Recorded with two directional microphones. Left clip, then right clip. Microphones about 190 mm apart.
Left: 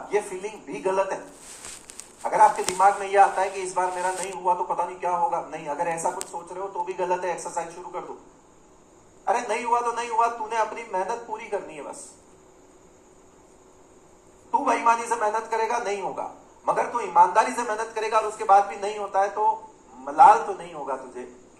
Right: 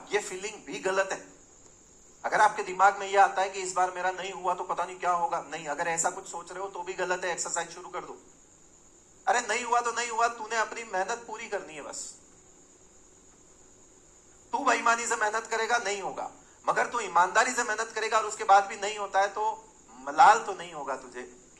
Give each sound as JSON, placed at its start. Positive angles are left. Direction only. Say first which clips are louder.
{"t": 0.1, "sound": "a woman's voice", "louder": "left 4 dB", "side_deg": -20}
{"t": 2.2, "sound": "a woman's voice", "louder": "left 5 dB", "side_deg": -15}
{"t": 9.2, "sound": "a woman's voice", "louder": "left 3 dB", "side_deg": -20}
{"t": 14.5, "sound": "a woman's voice", "louder": "left 4 dB", "side_deg": -20}